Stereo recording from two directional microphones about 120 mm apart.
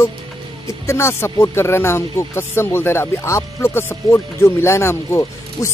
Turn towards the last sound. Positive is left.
turn(degrees=25)  # may be behind; listen again after turning